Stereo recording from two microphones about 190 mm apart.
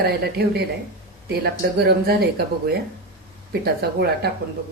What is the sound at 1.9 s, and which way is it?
A man's voice, 55° right (ahead or behind).